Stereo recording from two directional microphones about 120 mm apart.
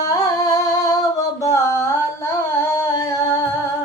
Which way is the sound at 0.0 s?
30° left (ahead or behind).